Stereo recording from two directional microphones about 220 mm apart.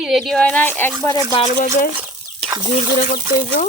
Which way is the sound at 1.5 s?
40° left (ahead or behind).